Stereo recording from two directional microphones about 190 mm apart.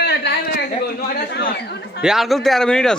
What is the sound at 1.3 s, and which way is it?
Speech, 60° left (ahead or behind).